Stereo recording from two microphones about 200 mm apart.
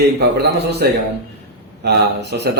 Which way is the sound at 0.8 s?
50° right (ahead or behind).